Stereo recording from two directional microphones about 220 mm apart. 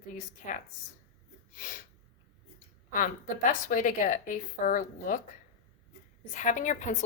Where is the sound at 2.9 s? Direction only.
35° left (ahead or behind).